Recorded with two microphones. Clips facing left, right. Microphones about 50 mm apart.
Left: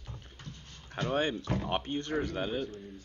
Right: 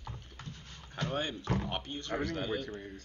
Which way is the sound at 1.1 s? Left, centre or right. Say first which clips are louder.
Left 4 dB; left.